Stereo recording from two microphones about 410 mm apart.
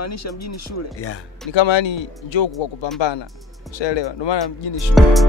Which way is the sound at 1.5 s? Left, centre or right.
Left.